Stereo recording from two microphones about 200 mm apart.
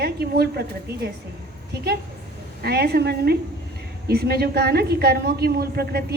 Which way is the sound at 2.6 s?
55° right (ahead or behind).